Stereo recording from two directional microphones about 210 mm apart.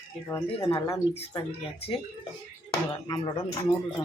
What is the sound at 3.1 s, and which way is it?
Speech, 20° left (ahead or behind).